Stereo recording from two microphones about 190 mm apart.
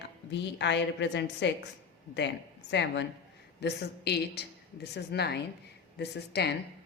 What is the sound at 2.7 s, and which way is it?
A woman's voice, 65° left (ahead or behind).